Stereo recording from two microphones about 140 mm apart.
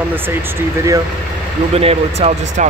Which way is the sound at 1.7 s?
45° right (ahead or behind).